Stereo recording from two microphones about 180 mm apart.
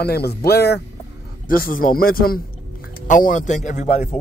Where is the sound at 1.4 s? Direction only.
50° left (ahead or behind).